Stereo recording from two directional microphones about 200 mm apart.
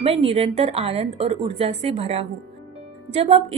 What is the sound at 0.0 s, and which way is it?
A woman's voice, 30° right (ahead or behind).